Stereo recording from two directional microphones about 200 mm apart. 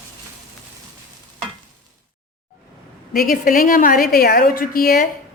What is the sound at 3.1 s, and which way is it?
Speech, 45° left (ahead or behind).